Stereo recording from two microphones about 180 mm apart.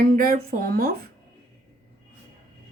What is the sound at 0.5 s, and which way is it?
Speech, 55° right (ahead or behind).